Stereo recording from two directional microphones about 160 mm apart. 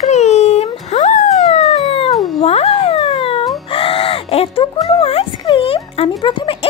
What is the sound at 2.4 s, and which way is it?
Cat, 40° left (ahead or behind).